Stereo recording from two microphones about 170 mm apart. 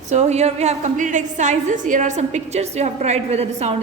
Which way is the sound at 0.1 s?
40° right (ahead or behind).